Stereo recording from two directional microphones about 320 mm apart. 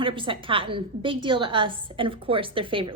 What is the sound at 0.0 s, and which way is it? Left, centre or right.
A woman's voice, centre.